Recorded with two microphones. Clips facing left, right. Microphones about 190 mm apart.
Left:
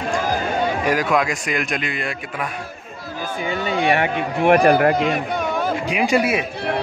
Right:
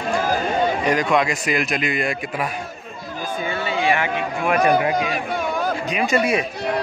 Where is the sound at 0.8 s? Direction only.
5° left (ahead or behind).